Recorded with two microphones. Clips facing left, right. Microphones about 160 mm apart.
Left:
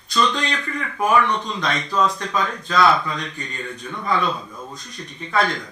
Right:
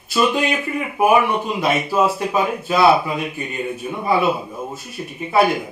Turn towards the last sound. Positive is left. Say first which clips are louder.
# right 5 dB
turn(degrees=-10)  # may be behind; listen again after turning